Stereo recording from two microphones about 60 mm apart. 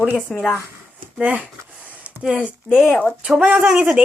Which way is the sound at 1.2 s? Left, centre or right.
Right.